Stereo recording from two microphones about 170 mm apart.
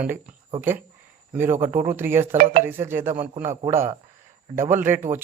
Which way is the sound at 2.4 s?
60° right (ahead or behind).